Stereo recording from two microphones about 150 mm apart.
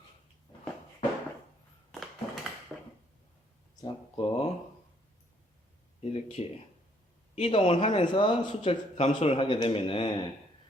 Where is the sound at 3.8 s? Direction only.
35° left (ahead or behind).